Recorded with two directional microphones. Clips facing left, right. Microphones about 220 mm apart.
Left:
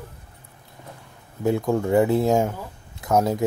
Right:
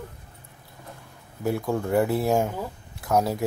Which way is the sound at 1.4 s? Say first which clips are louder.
Left 4 dB; 20° left (ahead or behind).